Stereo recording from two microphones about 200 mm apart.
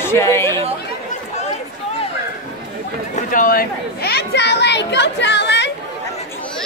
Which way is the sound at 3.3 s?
45° left (ahead or behind).